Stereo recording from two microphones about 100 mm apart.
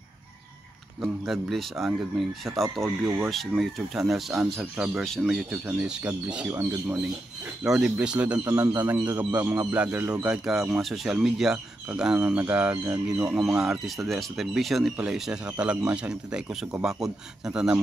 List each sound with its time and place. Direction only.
1.2 s speech: centre (ahead or behind); by 7.0 s 25° right (ahead or behind)
7.6 s speech: 5° right (ahead or behind)